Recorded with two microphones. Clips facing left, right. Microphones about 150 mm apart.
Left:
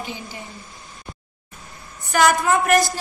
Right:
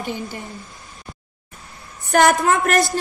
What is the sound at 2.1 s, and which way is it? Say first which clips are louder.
Speech: right 2 dB; 55° right (ahead or behind).